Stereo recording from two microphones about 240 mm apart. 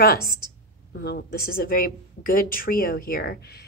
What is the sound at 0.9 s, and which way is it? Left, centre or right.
Speech, left.